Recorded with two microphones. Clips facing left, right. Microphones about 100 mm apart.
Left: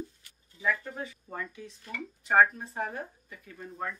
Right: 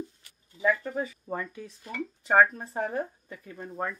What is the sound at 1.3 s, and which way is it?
Speech, 40° right (ahead or behind).